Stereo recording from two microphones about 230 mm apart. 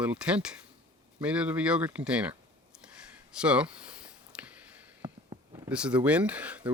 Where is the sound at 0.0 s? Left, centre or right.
Centre.